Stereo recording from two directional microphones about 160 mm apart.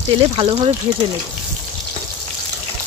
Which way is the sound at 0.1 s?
35° right (ahead or behind).